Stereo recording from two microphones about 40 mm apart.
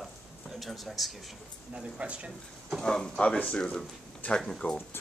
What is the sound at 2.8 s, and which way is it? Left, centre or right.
Speech, centre.